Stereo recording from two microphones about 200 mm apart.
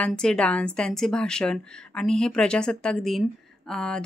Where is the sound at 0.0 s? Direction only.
5° left (ahead or behind).